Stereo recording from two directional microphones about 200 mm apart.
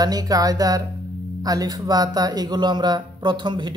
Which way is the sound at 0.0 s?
20° right (ahead or behind).